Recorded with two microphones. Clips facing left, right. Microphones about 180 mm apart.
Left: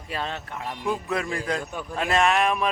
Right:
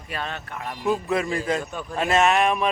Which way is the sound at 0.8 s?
5° right (ahead or behind).